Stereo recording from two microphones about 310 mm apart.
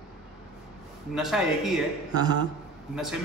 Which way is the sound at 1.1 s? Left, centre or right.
Centre.